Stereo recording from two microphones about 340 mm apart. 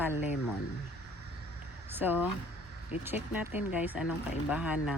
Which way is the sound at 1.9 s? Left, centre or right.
Centre.